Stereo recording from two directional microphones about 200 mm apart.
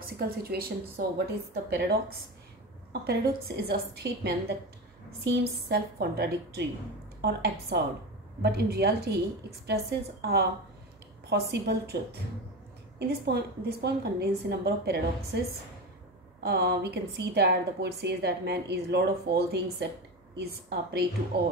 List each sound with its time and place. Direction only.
0.0 s a woman's voice: 45° right (ahead or behind)
13.3 s a woman's voice: 55° right (ahead or behind)
16.4 s a woman's voice: 55° right (ahead or behind)
21.3 s a woman's voice: 55° right (ahead or behind)